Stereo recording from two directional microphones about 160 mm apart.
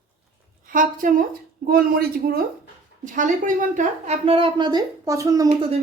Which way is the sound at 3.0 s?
55° right (ahead or behind).